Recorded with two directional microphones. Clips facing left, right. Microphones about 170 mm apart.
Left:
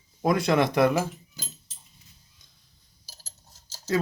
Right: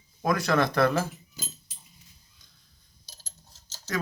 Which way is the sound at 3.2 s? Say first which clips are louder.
Even; 5° left (ahead or behind).